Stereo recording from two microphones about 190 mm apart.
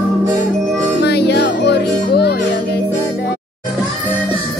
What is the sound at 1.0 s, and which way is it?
Music, 60° left (ahead or behind).